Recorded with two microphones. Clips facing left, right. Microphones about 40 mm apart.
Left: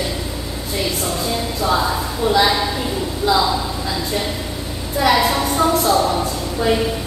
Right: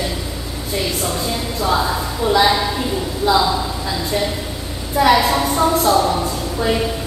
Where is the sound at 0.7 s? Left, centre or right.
Centre.